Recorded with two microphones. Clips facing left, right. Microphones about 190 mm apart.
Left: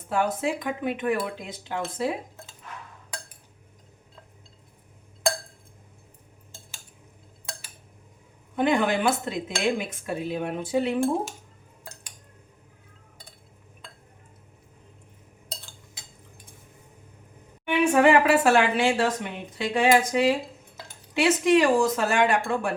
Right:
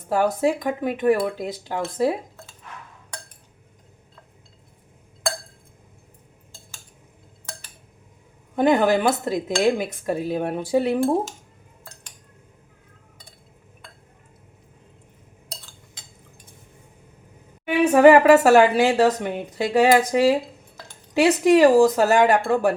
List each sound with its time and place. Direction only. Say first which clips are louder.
0.1 s cutlery: right 5 dB; 40° right (ahead or behind)
8.5 s cutlery: right 5 dB; 40° right (ahead or behind)
17.9 s cutlery: right 8 dB; 40° right (ahead or behind)